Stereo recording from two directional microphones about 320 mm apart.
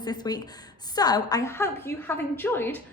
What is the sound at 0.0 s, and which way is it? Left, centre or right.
A woman's voice, centre.